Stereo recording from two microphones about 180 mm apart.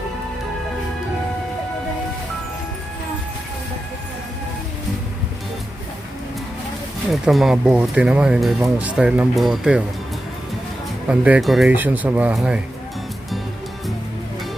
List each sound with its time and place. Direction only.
7.1 s speech: centre (ahead or behind)
11.1 s speech: 5° right (ahead or behind)